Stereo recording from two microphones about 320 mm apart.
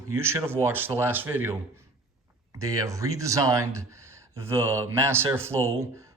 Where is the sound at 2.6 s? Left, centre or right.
Centre.